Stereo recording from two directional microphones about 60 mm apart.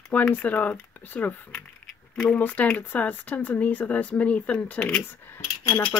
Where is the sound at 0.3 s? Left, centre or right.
Left.